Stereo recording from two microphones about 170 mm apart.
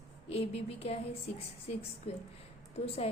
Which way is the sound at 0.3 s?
35° left (ahead or behind).